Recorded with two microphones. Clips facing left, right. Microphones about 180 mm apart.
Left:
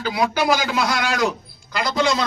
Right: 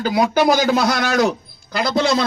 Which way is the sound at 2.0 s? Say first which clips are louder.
Right 3 dB; 60° right (ahead or behind).